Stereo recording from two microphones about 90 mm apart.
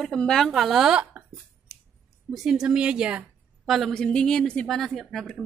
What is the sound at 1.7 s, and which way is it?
Scissors, 40° left (ahead or behind).